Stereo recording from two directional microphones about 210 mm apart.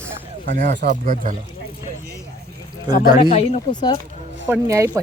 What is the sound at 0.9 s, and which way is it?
Speech, 40° right (ahead or behind).